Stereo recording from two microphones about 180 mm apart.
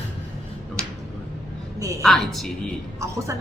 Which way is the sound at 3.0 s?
15° right (ahead or behind).